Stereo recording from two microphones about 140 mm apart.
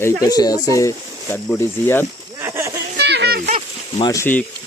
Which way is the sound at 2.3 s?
15° right (ahead or behind).